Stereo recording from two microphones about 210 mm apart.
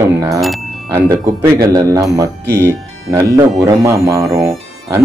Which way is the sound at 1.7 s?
15° right (ahead or behind).